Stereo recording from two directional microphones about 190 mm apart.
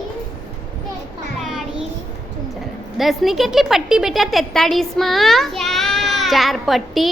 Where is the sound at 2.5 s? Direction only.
Centre (ahead or behind).